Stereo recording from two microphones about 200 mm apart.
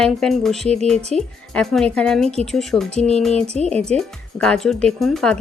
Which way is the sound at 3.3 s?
30° right (ahead or behind).